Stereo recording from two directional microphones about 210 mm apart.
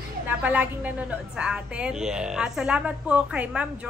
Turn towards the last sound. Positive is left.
turn(degrees=-5)  # may be behind; listen again after turning